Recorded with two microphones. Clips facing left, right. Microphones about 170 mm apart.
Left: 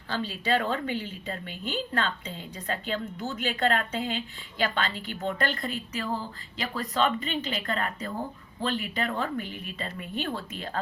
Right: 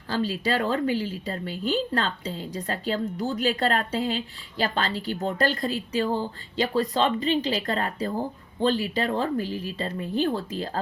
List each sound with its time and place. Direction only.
0.1 s a woman's voice: 40° right (ahead or behind)